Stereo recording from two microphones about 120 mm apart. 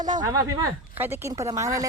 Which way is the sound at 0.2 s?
35° right (ahead or behind).